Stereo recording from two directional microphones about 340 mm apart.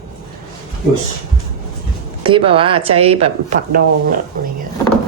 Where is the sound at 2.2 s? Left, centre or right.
Centre.